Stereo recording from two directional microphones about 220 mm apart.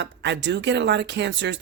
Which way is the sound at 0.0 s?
50° right (ahead or behind).